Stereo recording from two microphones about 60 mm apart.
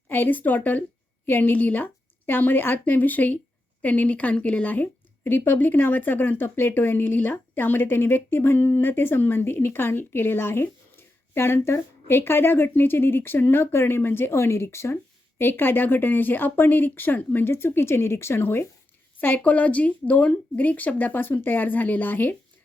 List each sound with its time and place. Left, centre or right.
0.1 s speech: left
15.4 s speech: left
19.4 s speech: left